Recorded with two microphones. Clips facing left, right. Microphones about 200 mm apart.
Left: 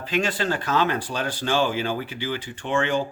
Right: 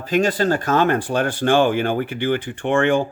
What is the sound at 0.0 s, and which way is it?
Speech, 40° right (ahead or behind).